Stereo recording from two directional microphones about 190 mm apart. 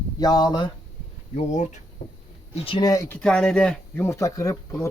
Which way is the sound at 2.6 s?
20° left (ahead or behind).